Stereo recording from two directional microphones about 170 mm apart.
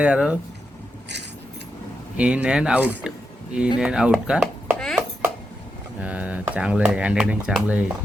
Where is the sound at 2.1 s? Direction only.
5° right (ahead or behind).